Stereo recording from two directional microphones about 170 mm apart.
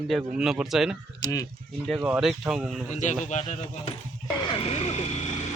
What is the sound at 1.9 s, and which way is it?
Speech, 5° right (ahead or behind).